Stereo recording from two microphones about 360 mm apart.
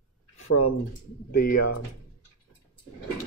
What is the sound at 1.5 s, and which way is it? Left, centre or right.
Speech, left.